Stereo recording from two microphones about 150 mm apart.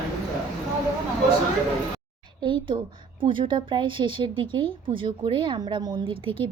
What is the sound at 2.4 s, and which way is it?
A woman's voice, 35° right (ahead or behind).